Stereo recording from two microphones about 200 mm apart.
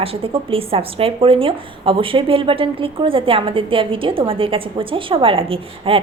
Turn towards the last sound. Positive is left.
turn(degrees=-25)  # may be behind; listen again after turning